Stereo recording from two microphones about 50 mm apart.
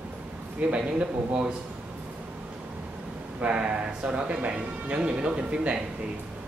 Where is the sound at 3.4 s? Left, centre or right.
Right.